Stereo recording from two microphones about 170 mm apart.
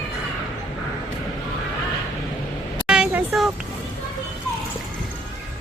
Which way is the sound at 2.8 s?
5° right (ahead or behind).